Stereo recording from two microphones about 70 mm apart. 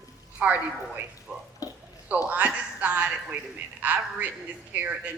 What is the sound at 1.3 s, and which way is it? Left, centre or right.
Water, centre.